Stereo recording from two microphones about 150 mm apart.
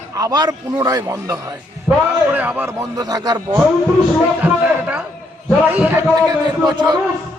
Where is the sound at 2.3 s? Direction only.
10° right (ahead or behind).